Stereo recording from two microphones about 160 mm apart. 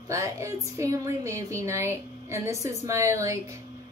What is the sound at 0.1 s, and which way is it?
A woman's voice, 20° right (ahead or behind).